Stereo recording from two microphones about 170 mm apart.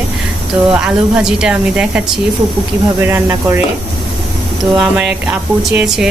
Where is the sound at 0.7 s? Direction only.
5° right (ahead or behind).